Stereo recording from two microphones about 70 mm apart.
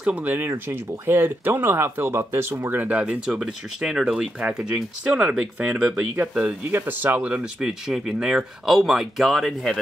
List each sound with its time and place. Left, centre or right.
0.0 s speech: right
0.5 s speech: right
2.8 s speech: centre
3.3 s speech: centre
6.7 s speech: right
7.9 s speech: centre